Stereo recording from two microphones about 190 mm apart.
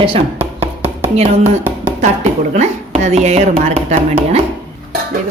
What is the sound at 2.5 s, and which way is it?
Speech, 35° right (ahead or behind).